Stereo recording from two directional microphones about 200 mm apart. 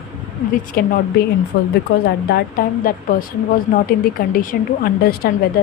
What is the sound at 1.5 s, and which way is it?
Speech, 60° left (ahead or behind).